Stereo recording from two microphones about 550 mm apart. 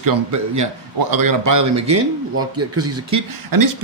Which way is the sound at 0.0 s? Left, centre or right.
Right.